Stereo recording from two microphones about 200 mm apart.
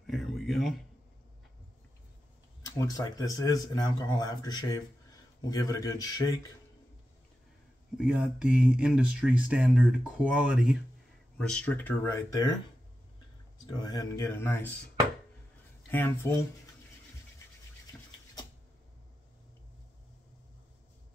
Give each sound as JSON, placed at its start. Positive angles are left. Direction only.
{"t": 0.0, "sound": "a sound", "side_deg": 0}
{"t": 2.6, "sound": "speech", "side_deg": 15}
{"t": 8.0, "sound": "speech", "side_deg": -5}
{"t": 13.7, "sound": "speech", "side_deg": 20}
{"t": 15.9, "sound": "speech", "side_deg": 10}